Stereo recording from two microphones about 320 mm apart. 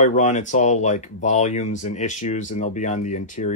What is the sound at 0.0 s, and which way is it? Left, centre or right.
Speech, left.